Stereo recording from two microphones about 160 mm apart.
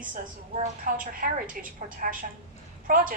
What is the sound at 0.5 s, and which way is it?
A woman's voice, 60° right (ahead or behind).